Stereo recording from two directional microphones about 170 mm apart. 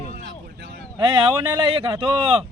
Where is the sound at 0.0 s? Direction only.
40° left (ahead or behind).